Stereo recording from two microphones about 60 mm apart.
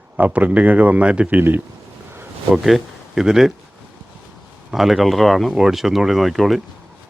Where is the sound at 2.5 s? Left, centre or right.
Centre.